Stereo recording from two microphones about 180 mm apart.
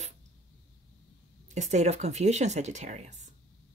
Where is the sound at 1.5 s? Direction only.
40° right (ahead or behind).